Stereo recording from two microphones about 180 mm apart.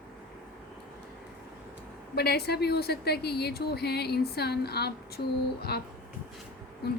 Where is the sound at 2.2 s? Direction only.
60° left (ahead or behind).